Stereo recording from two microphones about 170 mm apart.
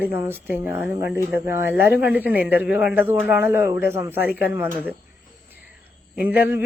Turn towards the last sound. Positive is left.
turn(degrees=-10)  # may be behind; listen again after turning